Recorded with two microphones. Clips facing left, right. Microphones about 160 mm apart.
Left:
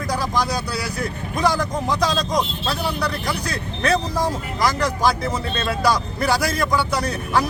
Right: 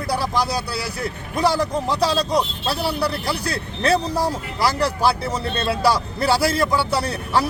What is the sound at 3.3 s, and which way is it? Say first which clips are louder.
Speech: right 1 dB; 30° right (ahead or behind).